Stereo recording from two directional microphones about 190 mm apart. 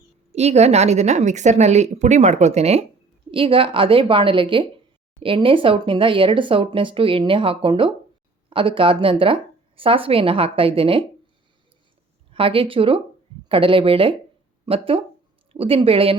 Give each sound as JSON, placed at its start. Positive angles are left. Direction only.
{"t": 0.3, "sound": "a woman's voice", "side_deg": -35}
{"t": 12.3, "sound": "speech", "side_deg": -30}